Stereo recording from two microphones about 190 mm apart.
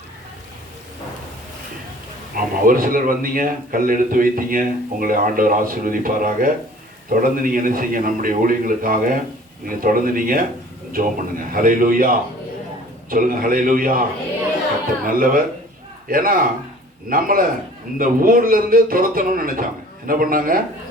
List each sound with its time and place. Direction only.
2.3 s a man's voice: 45° right (ahead or behind)
15.0 s a man's voice: 50° right (ahead or behind)